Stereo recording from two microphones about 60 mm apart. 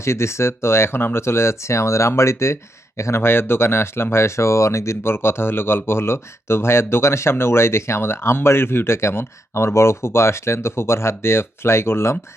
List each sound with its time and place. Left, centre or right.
0.0 s speech: left